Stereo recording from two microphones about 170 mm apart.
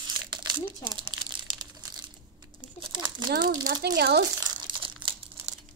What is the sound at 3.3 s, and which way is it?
Speech, 90° right.